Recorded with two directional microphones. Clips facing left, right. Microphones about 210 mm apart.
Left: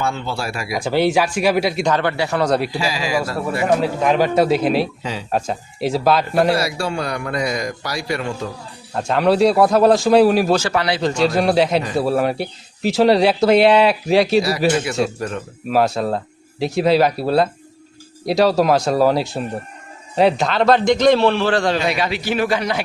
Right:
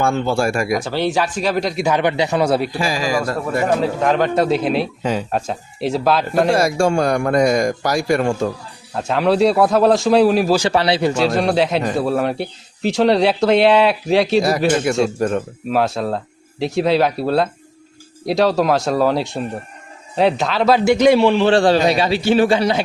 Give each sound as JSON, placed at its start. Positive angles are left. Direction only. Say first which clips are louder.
{"t": 0.0, "sound": "a man's voice", "louder": "right 6 dB", "side_deg": -50}
{"t": 0.8, "sound": "speech", "louder": "left 3 dB", "side_deg": 10}
{"t": 1.8, "sound": "a man's voice", "louder": "right 2 dB", "side_deg": -15}
{"t": 2.7, "sound": "a man's voice", "louder": "right 2 dB", "side_deg": -50}
{"t": 3.6, "sound": "speech", "louder": "left 1 dB", "side_deg": 5}
{"t": 6.5, "sound": "a man's voice", "louder": "right 4 dB", "side_deg": -45}
{"t": 8.9, "sound": "speech", "louder": "even", "side_deg": 0}
{"t": 10.7, "sound": "a man's voice", "louder": "right 3 dB", "side_deg": -25}
{"t": 11.0, "sound": "a man's voice", "louder": "even", "side_deg": -5}
{"t": 21.4, "sound": "a man's voice", "louder": "right 5 dB", "side_deg": -30}